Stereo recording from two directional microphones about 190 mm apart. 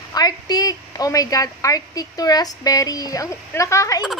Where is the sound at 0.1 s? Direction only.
20° left (ahead or behind).